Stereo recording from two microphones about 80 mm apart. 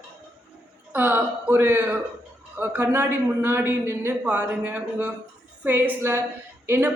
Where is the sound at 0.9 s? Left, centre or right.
Right.